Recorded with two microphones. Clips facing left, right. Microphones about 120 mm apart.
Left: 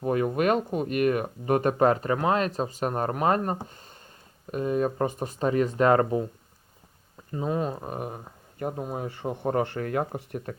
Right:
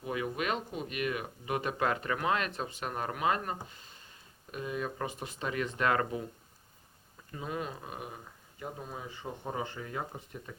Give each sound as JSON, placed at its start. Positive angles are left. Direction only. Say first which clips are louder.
{"t": 0.0, "sound": "speech", "louder": "left 10 dB", "side_deg": 45}
{"t": 7.3, "sound": "speech", "louder": "left 9 dB", "side_deg": 35}